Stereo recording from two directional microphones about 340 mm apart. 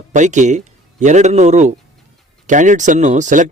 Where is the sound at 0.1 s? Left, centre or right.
Right.